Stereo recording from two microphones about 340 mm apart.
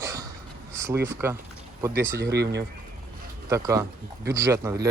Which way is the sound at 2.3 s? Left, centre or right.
Right.